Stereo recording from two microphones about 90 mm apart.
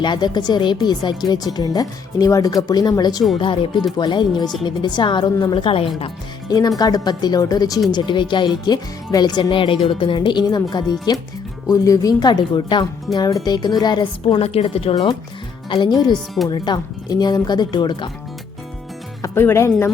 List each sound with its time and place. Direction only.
0.0 s speech: 55° left (ahead or behind)
3.3 s speech: 70° left (ahead or behind)
3.9 s speech: 55° left (ahead or behind)
5.6 s speech: 90° left
6.5 s speech: 45° left (ahead or behind)
7.9 s speech: 60° left (ahead or behind)
13.1 s speech: 45° left (ahead or behind); by 14.9 s 90° left
15.7 s speech: 55° left (ahead or behind)
19.2 s speech: 25° left (ahead or behind)